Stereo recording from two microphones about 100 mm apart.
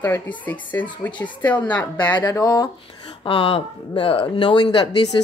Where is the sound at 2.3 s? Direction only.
40° left (ahead or behind).